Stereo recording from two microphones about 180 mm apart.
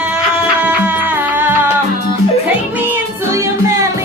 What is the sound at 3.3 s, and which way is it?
Music, 15° right (ahead or behind).